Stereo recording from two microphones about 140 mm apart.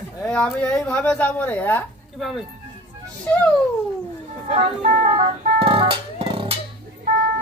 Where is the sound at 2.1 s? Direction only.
Centre (ahead or behind).